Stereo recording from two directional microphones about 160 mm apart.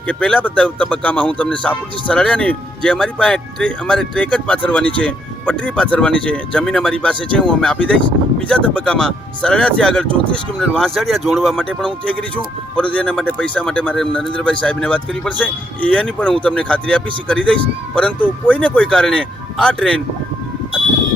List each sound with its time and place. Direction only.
0.1 s speech: 5° left (ahead or behind)